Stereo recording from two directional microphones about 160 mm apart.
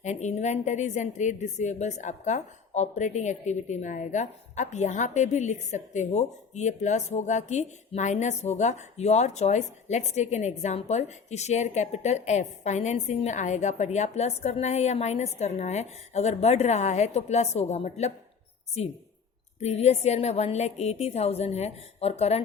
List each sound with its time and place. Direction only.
0.0 s a woman's voice: 50° left (ahead or behind)
19.5 s a woman's voice: 45° left (ahead or behind)